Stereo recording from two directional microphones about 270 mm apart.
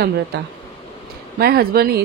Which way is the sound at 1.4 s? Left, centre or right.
Right.